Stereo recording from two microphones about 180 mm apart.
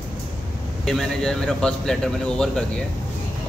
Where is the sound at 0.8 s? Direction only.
Centre (ahead or behind).